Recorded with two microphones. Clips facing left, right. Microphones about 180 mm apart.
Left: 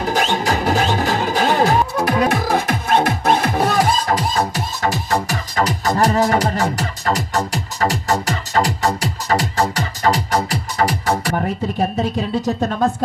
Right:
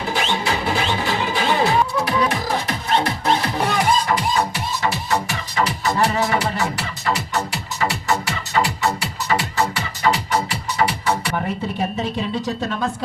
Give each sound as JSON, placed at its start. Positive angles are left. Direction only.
{"t": 0.0, "sound": "music", "side_deg": 45}